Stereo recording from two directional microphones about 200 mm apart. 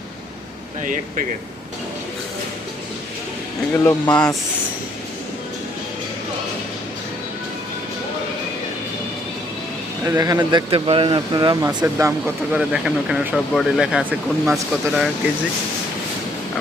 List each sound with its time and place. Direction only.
0.8 s speech: 40° right (ahead or behind)
3.8 s speech: 10° left (ahead or behind)
10.1 s speech: 15° right (ahead or behind)